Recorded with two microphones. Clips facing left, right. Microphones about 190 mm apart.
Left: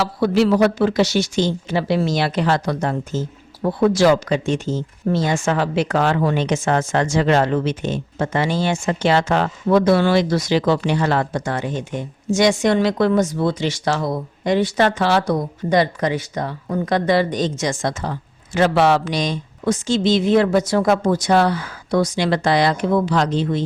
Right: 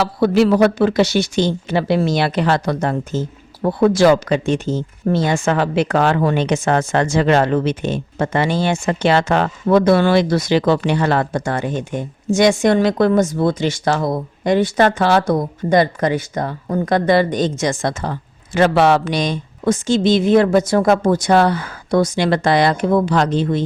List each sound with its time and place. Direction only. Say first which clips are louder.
0.0 s speech: right 3 dB; 60° right (ahead or behind)